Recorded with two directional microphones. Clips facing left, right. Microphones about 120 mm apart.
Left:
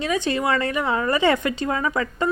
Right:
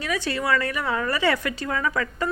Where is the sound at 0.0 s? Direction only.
20° left (ahead or behind).